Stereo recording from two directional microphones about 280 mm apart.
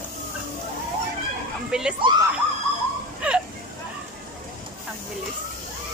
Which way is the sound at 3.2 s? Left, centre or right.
Centre.